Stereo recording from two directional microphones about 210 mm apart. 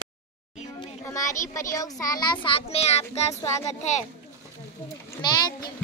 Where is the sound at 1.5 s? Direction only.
15° left (ahead or behind).